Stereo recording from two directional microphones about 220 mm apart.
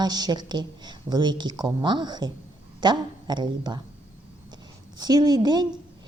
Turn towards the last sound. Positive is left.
turn(degrees=-20)  # may be behind; listen again after turning